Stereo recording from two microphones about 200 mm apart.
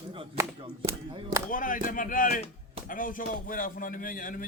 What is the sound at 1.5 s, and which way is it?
A man's voice, 40° left (ahead or behind).